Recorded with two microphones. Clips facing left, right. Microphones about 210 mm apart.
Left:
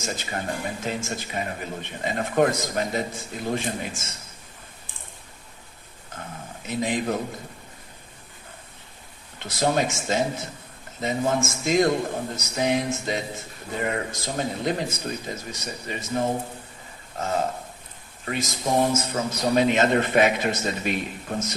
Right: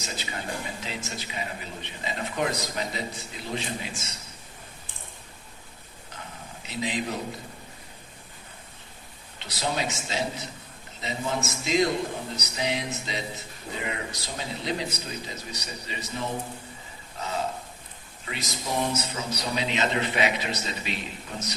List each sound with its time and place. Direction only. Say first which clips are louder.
0.0 s speech: left 5 dB; 50° left (ahead or behind)
6.1 s a sound: left 5 dB; 50° left (ahead or behind)
9.4 s speech: left 6 dB; 50° left (ahead or behind)